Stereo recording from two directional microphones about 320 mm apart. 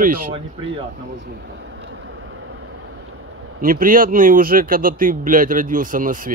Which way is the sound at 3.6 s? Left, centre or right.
Right.